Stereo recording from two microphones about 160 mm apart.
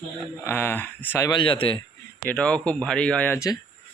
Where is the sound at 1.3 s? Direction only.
30° left (ahead or behind).